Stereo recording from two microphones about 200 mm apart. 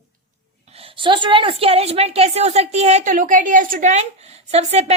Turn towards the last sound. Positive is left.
turn(degrees=-30)  # may be behind; listen again after turning